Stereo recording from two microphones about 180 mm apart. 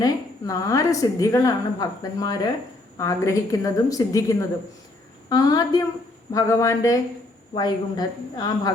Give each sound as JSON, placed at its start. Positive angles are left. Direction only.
{"t": 0.0, "sound": "a woman's voice", "side_deg": 20}